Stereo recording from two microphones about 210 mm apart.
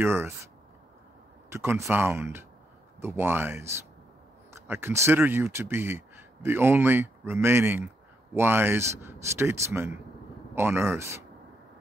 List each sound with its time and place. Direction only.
0.0 s speech: 10° right (ahead or behind)
1.5 s speech: 10° right (ahead or behind)